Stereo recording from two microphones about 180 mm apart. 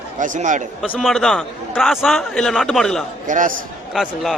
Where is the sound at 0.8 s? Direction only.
Centre (ahead or behind).